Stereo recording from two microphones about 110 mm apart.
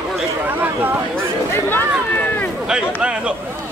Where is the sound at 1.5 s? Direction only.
20° left (ahead or behind).